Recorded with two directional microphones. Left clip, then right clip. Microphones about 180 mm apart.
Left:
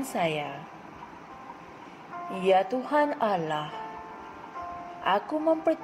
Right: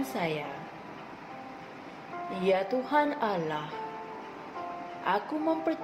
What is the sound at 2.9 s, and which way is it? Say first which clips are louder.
Speech: left 3 dB; 40° left (ahead or behind).